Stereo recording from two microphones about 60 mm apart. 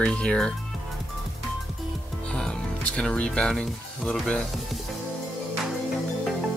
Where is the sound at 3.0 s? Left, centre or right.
Centre.